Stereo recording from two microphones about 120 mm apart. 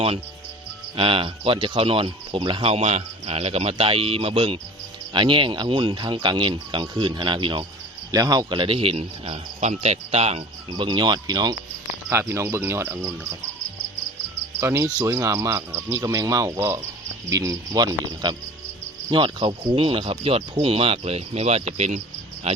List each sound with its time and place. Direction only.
0.9 s speech: 50° right (ahead or behind)
5.1 s speech: 45° right (ahead or behind)
8.1 s speech: 30° right (ahead or behind); by 10.8 s 60° right (ahead or behind)
10.8 s speech: 40° right (ahead or behind)
12.1 s speech: 20° right (ahead or behind)
14.6 s cricket: 25° right (ahead or behind)
14.9 s speech: 30° right (ahead or behind); by 22.6 s 60° right (ahead or behind)